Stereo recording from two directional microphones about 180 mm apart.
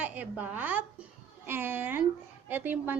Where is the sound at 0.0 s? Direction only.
10° right (ahead or behind).